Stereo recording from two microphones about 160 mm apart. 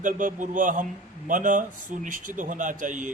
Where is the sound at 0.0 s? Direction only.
55° right (ahead or behind).